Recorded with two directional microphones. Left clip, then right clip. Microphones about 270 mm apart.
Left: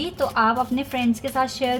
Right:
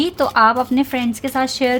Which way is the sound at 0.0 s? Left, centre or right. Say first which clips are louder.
Right 7 dB; right.